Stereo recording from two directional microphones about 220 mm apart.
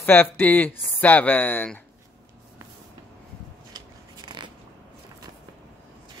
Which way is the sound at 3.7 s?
20° right (ahead or behind).